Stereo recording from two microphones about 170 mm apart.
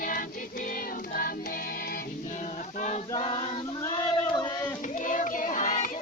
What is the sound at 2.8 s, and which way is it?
Choir, 45° left (ahead or behind).